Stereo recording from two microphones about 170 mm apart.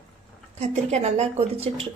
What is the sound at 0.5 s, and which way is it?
A woman's voice, 40° right (ahead or behind).